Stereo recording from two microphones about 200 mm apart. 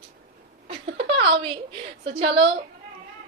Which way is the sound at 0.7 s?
25° right (ahead or behind).